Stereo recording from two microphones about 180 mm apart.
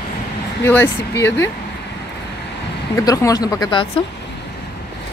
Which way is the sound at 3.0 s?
20° left (ahead or behind).